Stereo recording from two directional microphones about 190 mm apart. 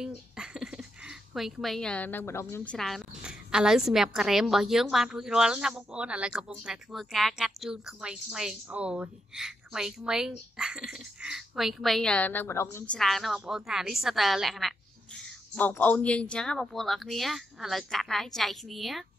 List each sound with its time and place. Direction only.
0.0 s speech: 5° right (ahead or behind); by 12.8 s 15° left (ahead or behind)
12.9 s speech: centre (ahead or behind)